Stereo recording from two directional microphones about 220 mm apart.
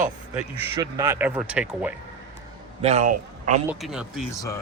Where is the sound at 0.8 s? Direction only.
15° right (ahead or behind).